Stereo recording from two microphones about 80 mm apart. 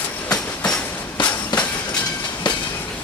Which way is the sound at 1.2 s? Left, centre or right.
Left.